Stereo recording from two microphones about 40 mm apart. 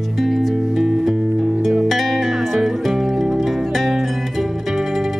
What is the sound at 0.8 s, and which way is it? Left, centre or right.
Music, centre.